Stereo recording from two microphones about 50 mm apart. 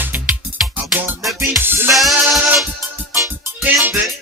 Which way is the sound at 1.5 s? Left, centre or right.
Right.